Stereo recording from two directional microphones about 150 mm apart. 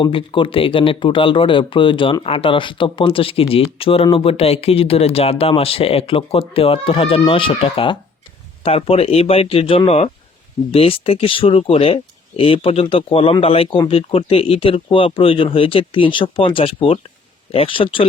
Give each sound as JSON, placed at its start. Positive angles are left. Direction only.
{"t": 0.0, "sound": "speech", "side_deg": 35}